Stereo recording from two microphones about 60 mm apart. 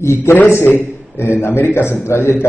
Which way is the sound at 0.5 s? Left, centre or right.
Left.